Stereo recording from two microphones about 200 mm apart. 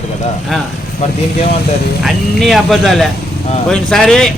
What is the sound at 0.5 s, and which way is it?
Speech, centre (ahead or behind).